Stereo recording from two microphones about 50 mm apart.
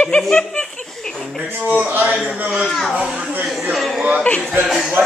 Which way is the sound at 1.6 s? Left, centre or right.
Right.